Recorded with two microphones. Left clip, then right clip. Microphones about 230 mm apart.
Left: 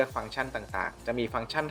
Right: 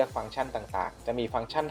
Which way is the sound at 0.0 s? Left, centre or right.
Centre.